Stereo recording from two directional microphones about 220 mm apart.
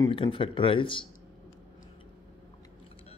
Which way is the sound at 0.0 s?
20° left (ahead or behind).